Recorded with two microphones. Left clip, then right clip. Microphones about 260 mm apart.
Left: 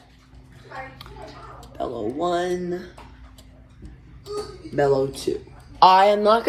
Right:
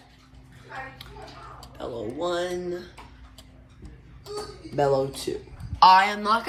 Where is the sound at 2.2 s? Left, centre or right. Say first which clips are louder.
Left 4 dB; centre.